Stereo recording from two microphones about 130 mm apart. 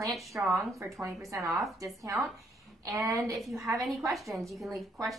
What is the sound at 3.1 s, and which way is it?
A woman's voice, centre (ahead or behind).